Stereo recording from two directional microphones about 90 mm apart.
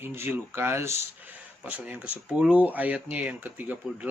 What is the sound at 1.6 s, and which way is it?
Speech, 20° right (ahead or behind).